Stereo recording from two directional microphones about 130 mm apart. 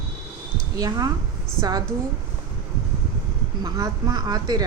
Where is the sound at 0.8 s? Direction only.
30° right (ahead or behind).